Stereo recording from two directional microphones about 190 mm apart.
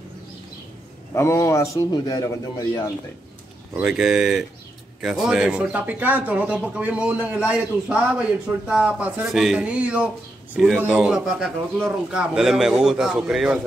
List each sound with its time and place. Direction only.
1.1 s a man's voice: 15° left (ahead or behind)
3.7 s speech: 5° right (ahead or behind)